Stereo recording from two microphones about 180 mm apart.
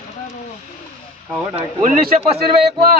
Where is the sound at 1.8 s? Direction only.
45° right (ahead or behind).